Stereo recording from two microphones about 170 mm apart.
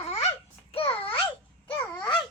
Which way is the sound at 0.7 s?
35° left (ahead or behind).